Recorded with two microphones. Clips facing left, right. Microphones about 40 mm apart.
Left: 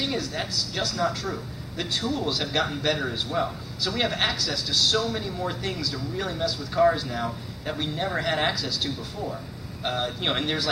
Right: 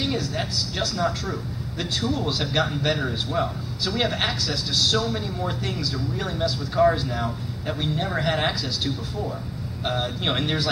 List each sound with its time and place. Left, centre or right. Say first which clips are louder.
0.0 s a man's voice: right 2 dB; centre